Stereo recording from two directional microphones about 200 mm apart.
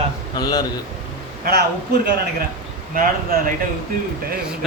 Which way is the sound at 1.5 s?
50° right (ahead or behind).